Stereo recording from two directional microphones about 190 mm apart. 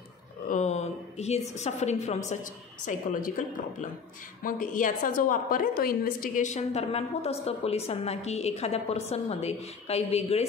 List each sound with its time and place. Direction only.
0.5 s a woman's voice: 35° left (ahead or behind)